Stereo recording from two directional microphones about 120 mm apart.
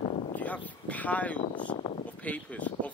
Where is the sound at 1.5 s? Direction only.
40° left (ahead or behind).